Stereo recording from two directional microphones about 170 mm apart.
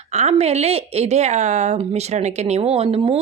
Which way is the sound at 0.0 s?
40° right (ahead or behind).